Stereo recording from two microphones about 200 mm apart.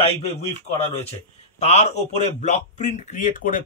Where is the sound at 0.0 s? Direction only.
30° left (ahead or behind).